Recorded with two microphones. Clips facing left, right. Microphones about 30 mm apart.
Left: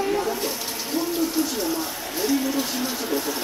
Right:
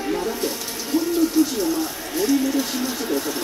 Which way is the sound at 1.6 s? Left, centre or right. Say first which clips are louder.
Right 3 dB; centre.